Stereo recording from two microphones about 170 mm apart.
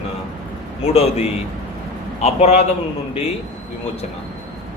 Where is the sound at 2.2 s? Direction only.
40° left (ahead or behind).